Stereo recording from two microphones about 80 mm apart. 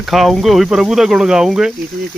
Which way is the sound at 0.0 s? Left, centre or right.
Centre.